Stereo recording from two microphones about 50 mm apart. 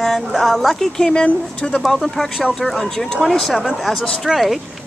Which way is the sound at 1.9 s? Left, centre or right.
Centre.